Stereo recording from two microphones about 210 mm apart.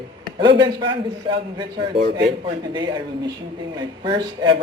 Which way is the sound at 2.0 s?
50° right (ahead or behind).